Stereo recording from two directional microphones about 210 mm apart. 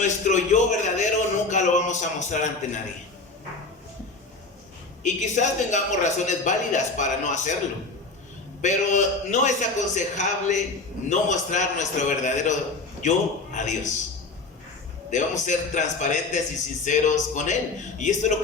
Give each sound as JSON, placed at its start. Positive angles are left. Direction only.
{"t": 0.0, "sound": "a woman's voice", "side_deg": 35}
{"t": 5.0, "sound": "a woman's voice", "side_deg": 35}
{"t": 8.6, "sound": "a woman's voice", "side_deg": 35}
{"t": 15.1, "sound": "a woman's voice", "side_deg": 35}